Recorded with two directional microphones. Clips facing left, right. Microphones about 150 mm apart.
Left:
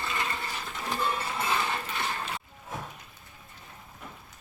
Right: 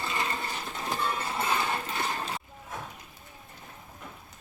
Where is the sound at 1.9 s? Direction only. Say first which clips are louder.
Right 1 dB; 30° right (ahead or behind).